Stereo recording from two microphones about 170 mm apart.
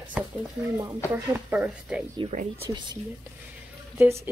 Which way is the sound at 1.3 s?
10° right (ahead or behind).